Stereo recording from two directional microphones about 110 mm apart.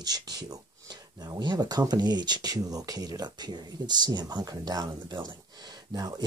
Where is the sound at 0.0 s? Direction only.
35° right (ahead or behind).